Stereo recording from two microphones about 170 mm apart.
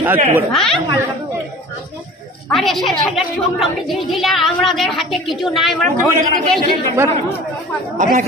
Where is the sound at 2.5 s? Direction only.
Centre (ahead or behind).